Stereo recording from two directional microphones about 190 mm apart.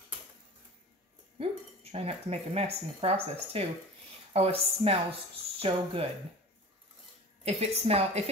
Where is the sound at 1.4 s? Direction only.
30° right (ahead or behind).